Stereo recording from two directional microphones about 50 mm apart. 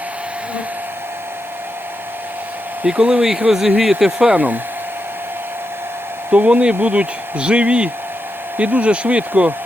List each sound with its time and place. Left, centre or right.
2.8 s speech: centre
4.4 s speech: right
6.3 s speech: right